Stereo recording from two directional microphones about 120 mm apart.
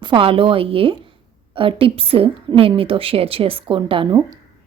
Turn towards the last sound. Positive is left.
turn(degrees=-45)  # may be behind; listen again after turning